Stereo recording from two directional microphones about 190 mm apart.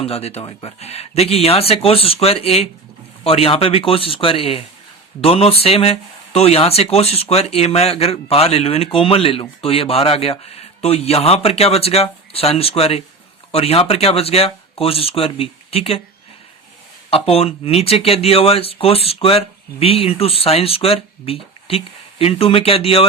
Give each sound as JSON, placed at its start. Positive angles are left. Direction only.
{"t": 0.0, "sound": "speech", "side_deg": 35}
{"t": 17.1, "sound": "speech", "side_deg": 30}